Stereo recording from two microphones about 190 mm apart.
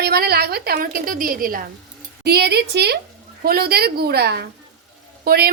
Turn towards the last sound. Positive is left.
turn(degrees=-55)  # may be behind; listen again after turning